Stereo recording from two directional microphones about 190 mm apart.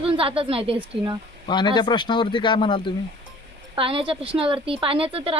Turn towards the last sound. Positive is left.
turn(degrees=-30)  # may be behind; listen again after turning